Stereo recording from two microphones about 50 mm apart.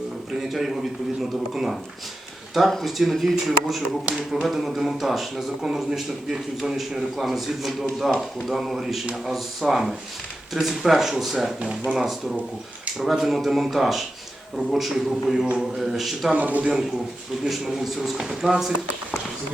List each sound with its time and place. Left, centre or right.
0.3 s a man's voice: centre
16.3 s a man's voice: right
17.4 s a man's voice: centre